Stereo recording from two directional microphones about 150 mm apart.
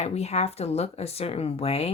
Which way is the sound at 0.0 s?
45° left (ahead or behind).